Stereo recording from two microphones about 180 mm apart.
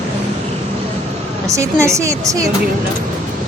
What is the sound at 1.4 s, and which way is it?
Speech, 15° right (ahead or behind).